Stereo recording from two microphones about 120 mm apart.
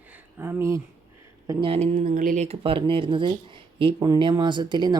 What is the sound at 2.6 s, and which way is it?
Speech, 45° right (ahead or behind).